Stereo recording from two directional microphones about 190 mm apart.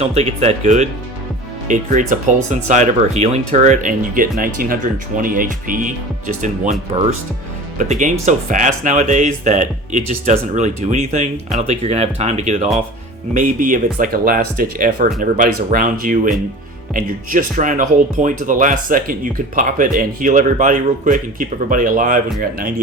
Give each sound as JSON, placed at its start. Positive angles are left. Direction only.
{"t": 0.0, "sound": "speech", "side_deg": -35}